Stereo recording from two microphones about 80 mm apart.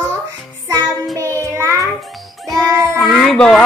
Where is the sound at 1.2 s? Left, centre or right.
Right.